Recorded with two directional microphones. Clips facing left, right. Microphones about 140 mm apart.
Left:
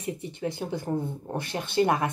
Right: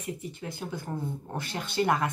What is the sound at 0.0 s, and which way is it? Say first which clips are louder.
Speech: left 5 dB; 25° left (ahead or behind).